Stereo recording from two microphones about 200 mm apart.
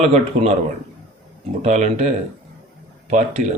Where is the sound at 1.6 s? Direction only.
35° right (ahead or behind).